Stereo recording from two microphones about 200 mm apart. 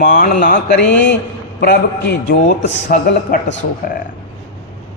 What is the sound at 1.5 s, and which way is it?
Speech, 55° left (ahead or behind).